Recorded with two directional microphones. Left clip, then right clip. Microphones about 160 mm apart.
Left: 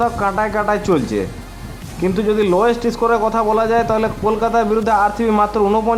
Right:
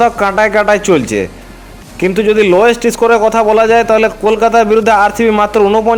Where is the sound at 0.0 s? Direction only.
25° right (ahead or behind).